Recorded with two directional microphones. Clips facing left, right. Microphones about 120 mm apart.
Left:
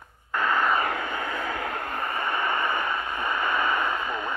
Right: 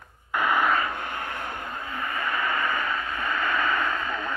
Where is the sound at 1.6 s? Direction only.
90° left.